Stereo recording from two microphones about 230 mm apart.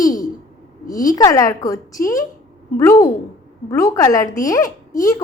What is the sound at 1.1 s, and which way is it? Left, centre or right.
Speech, centre.